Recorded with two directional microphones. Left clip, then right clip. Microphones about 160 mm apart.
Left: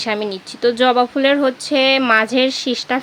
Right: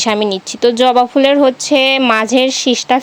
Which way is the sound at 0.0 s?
40° right (ahead or behind).